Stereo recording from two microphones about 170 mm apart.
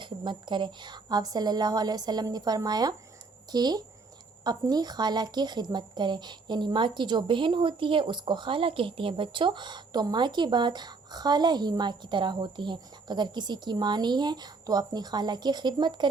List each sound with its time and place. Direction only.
0.0 s speech: 25° right (ahead or behind)